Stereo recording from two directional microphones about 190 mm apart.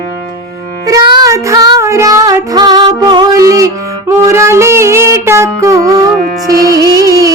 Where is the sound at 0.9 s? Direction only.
20° right (ahead or behind).